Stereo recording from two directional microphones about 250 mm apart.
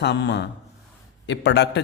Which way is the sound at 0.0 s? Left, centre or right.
Left.